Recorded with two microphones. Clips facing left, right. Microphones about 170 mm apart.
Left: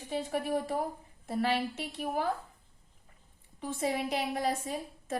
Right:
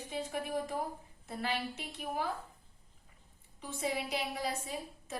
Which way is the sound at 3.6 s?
50° left (ahead or behind).